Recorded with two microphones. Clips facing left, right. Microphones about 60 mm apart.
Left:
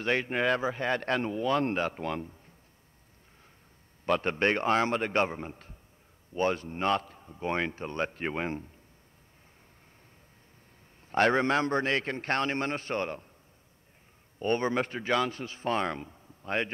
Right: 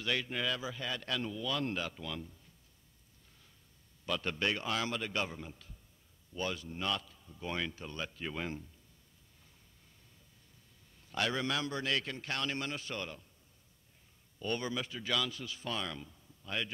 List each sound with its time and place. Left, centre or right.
0.0 s speech: left
4.0 s speech: left
11.1 s speech: left
14.4 s speech: left